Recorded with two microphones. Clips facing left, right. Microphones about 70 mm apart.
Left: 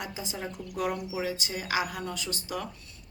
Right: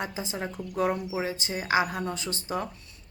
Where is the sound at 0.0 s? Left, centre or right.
Right.